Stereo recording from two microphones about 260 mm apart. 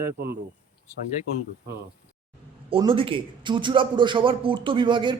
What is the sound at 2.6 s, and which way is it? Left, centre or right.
A man's voice, centre.